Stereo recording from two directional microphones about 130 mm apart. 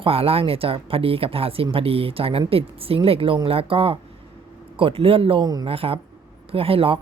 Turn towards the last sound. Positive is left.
turn(degrees=-45)  # may be behind; listen again after turning